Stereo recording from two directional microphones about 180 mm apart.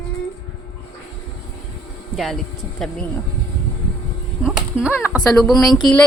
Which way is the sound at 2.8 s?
Centre (ahead or behind).